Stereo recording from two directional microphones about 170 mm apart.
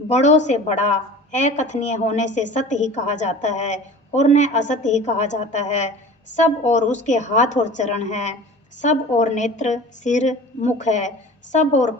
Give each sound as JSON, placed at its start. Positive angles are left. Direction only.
{"t": 0.1, "sound": "a woman's voice", "side_deg": 40}